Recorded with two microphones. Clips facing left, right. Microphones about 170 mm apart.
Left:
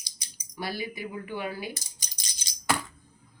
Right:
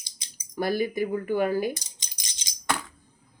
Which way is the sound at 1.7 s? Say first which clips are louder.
Right 1 dB; 20° right (ahead or behind).